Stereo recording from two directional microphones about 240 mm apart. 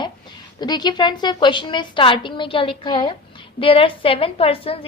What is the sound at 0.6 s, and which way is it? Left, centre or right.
A woman's voice, centre.